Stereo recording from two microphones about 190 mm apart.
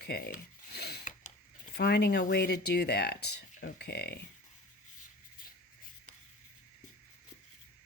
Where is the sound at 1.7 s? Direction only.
60° left (ahead or behind).